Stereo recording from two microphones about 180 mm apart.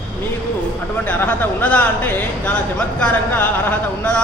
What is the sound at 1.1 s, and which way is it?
Speech, 10° left (ahead or behind).